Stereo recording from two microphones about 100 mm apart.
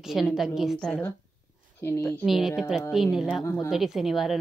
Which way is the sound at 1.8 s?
25° left (ahead or behind).